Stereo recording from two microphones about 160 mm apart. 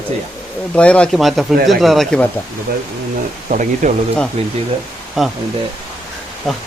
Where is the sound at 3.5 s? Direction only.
55° right (ahead or behind).